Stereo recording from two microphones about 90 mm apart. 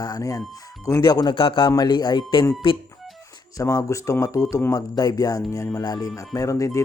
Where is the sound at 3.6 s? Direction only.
40° left (ahead or behind).